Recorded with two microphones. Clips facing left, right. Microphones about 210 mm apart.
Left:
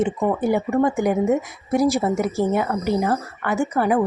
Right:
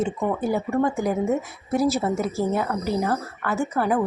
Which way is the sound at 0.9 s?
75° left (ahead or behind).